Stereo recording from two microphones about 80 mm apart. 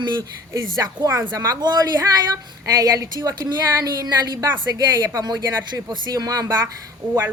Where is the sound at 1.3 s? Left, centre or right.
Right.